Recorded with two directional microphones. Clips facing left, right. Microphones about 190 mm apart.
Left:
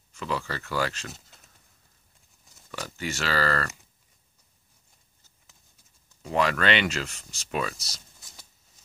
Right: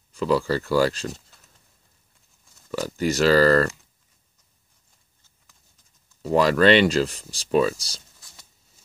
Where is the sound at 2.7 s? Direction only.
35° right (ahead or behind).